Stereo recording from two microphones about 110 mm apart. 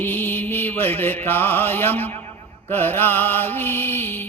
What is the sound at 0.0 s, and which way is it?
Music, 15° left (ahead or behind).